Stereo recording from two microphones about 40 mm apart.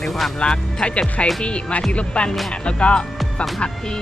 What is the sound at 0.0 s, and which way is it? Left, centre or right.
Speech, centre.